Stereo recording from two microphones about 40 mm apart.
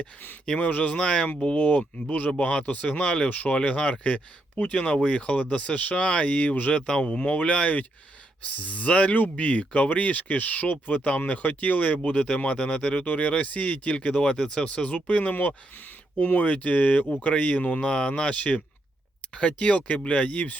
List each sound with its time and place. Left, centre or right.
0.6 s speech: left
0.9 s speech: left
3.2 s speech: left
3.5 s speech: left
7.3 s speech: left
13.1 s speech: left
14.6 s speech: left
15.3 s speech: left
17.7 s speech: left